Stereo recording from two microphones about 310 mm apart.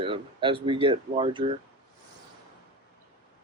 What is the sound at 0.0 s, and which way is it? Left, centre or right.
Speech, centre.